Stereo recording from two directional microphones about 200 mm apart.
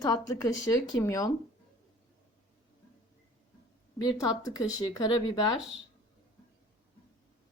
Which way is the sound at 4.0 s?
20° left (ahead or behind).